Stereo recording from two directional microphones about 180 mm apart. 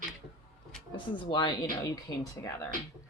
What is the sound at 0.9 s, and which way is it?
Speech, 25° left (ahead or behind).